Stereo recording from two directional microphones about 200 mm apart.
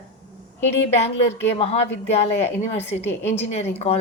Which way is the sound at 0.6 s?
65° left (ahead or behind).